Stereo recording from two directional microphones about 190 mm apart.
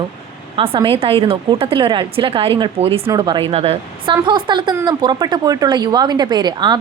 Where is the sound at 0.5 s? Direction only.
30° right (ahead or behind).